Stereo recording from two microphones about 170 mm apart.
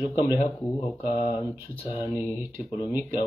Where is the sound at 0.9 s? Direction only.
30° left (ahead or behind).